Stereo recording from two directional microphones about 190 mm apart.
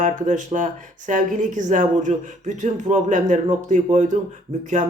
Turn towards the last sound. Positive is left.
turn(degrees=-40)  # may be behind; listen again after turning